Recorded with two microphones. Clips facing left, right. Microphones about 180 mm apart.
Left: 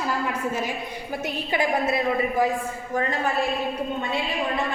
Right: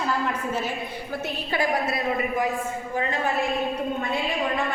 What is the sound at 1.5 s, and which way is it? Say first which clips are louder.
Speech: left 2 dB; 20° left (ahead or behind).